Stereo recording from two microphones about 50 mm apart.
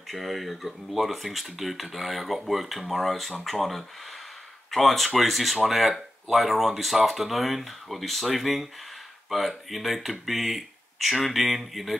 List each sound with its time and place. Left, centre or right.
0.1 s speech: centre